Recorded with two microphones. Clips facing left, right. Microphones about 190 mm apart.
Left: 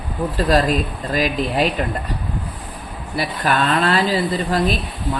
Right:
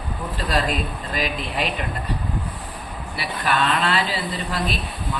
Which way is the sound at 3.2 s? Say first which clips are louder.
Left 4 dB; 40° left (ahead or behind).